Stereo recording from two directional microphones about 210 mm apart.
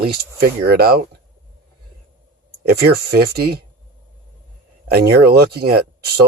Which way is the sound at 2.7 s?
50° right (ahead or behind).